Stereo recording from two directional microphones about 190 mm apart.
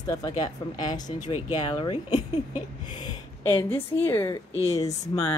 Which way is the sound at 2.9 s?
25° left (ahead or behind).